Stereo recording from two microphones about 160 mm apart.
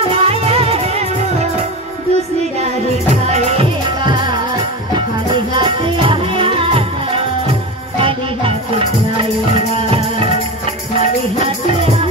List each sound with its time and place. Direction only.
0.1 s music: 35° right (ahead or behind)
3.3 s music: 45° right (ahead or behind)